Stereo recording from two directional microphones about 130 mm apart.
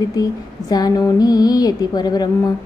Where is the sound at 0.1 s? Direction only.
30° left (ahead or behind).